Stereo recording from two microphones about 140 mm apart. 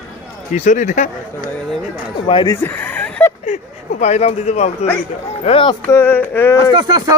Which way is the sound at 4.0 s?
55° left (ahead or behind).